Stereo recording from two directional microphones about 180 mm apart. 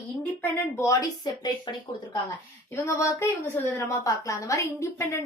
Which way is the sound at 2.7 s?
15° left (ahead or behind).